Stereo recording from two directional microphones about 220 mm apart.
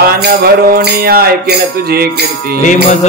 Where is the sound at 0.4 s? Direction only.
45° right (ahead or behind).